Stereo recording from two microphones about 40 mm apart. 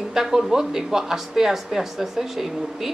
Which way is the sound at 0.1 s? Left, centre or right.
Centre.